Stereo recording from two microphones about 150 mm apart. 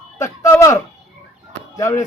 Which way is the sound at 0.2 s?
20° left (ahead or behind).